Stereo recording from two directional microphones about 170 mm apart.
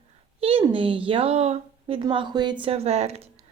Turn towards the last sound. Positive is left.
turn(degrees=-40)  # may be behind; listen again after turning